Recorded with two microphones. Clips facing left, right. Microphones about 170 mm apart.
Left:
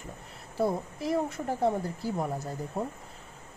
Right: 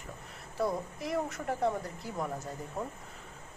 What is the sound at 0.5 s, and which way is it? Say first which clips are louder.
Speech: left 3 dB; 30° left (ahead or behind).